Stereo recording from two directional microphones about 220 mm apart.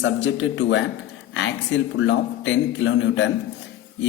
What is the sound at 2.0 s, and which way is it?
A man's voice, 55° left (ahead or behind).